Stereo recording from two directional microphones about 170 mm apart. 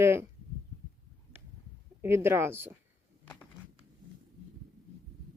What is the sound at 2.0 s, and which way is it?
Speech, 15° right (ahead or behind).